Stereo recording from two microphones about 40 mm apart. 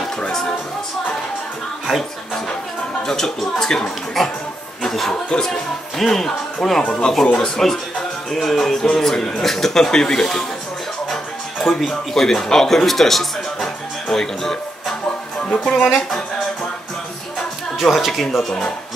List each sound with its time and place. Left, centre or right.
3.1 s speech: centre
4.8 s a sound: centre
5.9 s speech: centre
11.7 s a man's voice: centre
15.5 s speech: left
17.8 s a man's voice: centre